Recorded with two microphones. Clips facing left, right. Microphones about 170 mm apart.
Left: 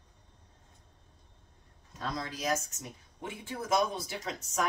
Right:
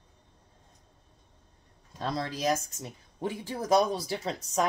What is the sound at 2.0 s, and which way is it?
Speech, 35° right (ahead or behind).